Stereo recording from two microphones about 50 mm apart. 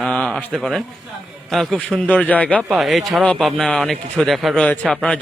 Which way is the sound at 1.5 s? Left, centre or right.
Centre.